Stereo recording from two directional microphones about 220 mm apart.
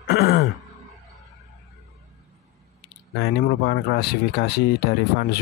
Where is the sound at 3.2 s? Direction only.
45° left (ahead or behind).